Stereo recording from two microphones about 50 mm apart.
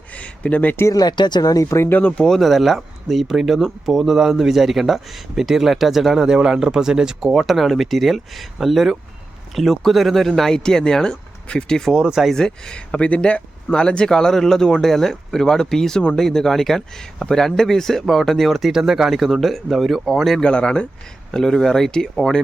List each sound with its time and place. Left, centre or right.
0.2 s a sound: left
1.9 s speech: left
2.1 s speech: centre
2.4 s speech: centre
11.9 s speech: centre
12.3 s speech: centre
18.7 s speech: centre
20.4 s speech: centre